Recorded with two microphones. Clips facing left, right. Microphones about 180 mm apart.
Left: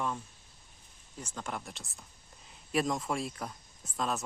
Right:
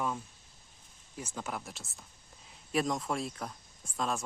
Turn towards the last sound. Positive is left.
turn(degrees=0)  # may be behind; listen again after turning